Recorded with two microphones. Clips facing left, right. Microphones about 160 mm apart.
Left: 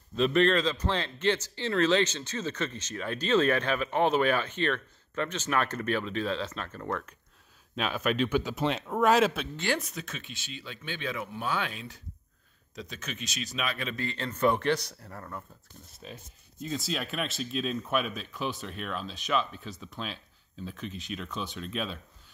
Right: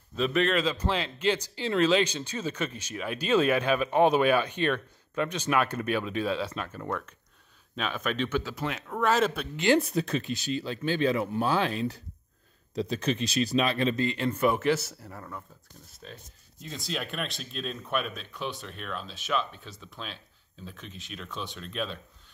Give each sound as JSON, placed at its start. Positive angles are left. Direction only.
{"t": 0.1, "sound": "a man's voice", "side_deg": 0}
{"t": 7.7, "sound": "speech", "side_deg": 10}
{"t": 9.2, "sound": "speech", "side_deg": 5}
{"t": 9.8, "sound": "speech", "side_deg": -35}
{"t": 14.0, "sound": "speech", "side_deg": -10}